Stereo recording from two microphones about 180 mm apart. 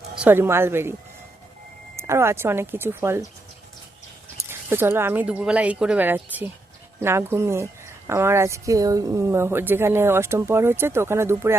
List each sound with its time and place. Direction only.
0.2 s a woman's voice: 10° right (ahead or behind)
2.0 s a woman's voice: 15° right (ahead or behind)
4.7 s a woman's voice: 10° right (ahead or behind)